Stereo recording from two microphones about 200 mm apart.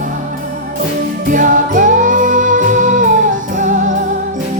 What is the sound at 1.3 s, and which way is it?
Music, 40° right (ahead or behind).